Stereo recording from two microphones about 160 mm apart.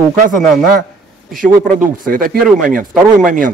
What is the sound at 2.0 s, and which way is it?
Speech, 65° right (ahead or behind).